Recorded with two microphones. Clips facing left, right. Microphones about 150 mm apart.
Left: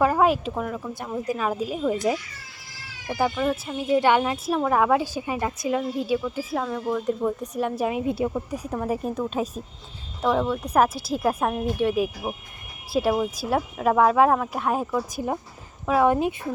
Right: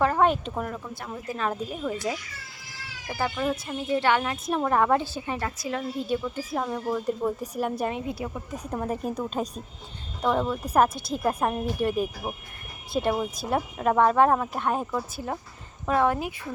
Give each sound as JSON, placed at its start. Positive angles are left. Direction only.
{"t": 0.0, "sound": "speech", "side_deg": 5}
{"t": 0.9, "sound": "a woman's voice", "side_deg": 15}
{"t": 3.2, "sound": "a woman's voice", "side_deg": 10}
{"t": 3.8, "sound": "a woman's voice", "side_deg": 15}
{"t": 4.4, "sound": "a woman's voice", "side_deg": 5}
{"t": 6.1, "sound": "speech", "side_deg": 5}
{"t": 7.9, "sound": "speech", "side_deg": 25}
{"t": 8.7, "sound": "speech", "side_deg": 0}
{"t": 15.1, "sound": "a woman's voice", "side_deg": 15}